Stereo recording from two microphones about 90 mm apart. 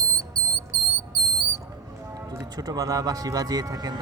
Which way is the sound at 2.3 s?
40° right (ahead or behind).